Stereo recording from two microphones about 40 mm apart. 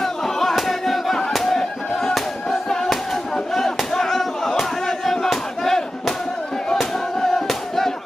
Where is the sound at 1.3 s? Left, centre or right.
Centre.